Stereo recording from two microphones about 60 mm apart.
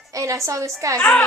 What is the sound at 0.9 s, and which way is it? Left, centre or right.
Speech, left.